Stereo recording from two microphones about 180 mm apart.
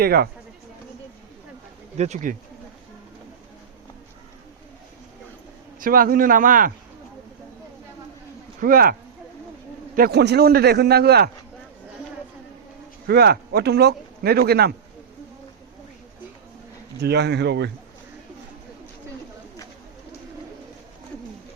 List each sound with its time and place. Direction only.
0.0 s a man's voice: 60° right (ahead or behind)
2.0 s speech: 40° right (ahead or behind)
5.8 s a man's voice: 50° right (ahead or behind)
8.6 s a man's voice: 50° right (ahead or behind)
13.1 s speech: 60° right (ahead or behind)
17.0 s speech: 70° right (ahead or behind)